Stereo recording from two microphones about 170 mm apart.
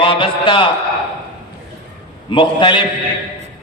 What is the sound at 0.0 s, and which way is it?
Speech, 30° left (ahead or behind).